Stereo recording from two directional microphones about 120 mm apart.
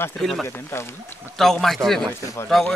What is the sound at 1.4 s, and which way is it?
Speech, 5° left (ahead or behind).